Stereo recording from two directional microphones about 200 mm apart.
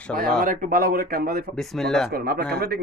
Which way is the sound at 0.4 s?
45° right (ahead or behind).